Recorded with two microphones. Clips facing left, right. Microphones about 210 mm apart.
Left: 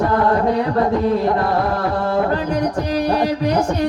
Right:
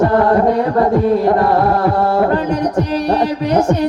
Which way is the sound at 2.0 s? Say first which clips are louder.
Right 4 dB; 45° right (ahead or behind).